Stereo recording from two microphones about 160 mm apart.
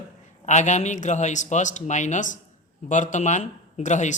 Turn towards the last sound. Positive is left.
turn(degrees=50)  # may be behind; listen again after turning